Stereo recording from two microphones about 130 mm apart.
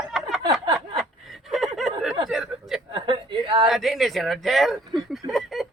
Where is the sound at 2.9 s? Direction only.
40° right (ahead or behind).